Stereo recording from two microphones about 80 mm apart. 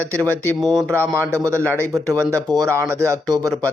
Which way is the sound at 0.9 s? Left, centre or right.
Right.